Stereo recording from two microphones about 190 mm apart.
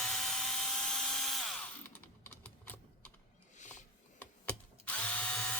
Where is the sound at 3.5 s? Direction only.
40° left (ahead or behind).